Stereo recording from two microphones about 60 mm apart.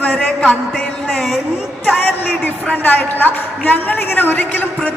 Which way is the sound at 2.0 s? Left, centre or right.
Left.